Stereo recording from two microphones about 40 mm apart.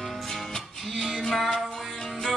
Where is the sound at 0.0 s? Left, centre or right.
Centre.